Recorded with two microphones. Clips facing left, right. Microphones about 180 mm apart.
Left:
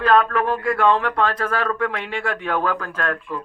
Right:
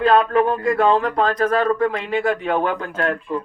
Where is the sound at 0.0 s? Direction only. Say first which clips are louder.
Right 2 dB; 25° right (ahead or behind).